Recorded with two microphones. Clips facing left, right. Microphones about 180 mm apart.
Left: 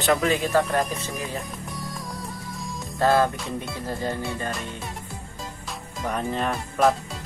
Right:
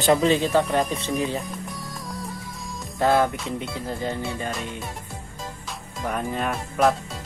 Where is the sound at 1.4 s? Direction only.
Centre (ahead or behind).